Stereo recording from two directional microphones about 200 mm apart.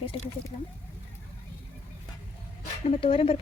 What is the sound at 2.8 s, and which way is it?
Speech, 30° left (ahead or behind).